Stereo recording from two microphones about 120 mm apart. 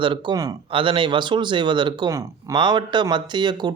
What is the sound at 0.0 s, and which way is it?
A man's voice, 45° right (ahead or behind).